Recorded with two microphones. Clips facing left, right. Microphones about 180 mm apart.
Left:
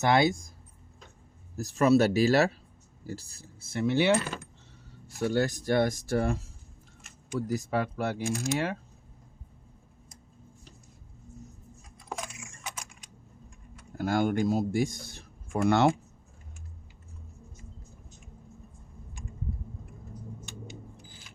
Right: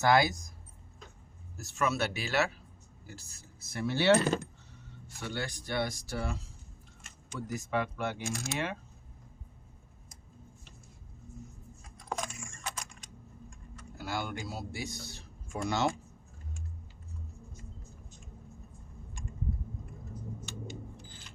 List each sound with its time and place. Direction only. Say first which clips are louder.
0.0 s speech: left 2 dB; 25° left (ahead or behind)
1.5 s speech: left 10 dB; 35° left (ahead or behind); by 4.2 s 15° left (ahead or behind)
5.0 s speech: left 11 dB; 40° left (ahead or behind)
7.3 s speech: left 4 dB; 35° left (ahead or behind)
11.9 s computer keyboard: right 1 dB; 5° left (ahead or behind)
13.9 s speech: left 10 dB; 50° left (ahead or behind)
21.1 s a sound: even; 10° left (ahead or behind)